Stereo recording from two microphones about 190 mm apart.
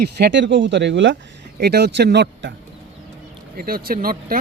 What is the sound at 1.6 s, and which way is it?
Speech, 60° right (ahead or behind).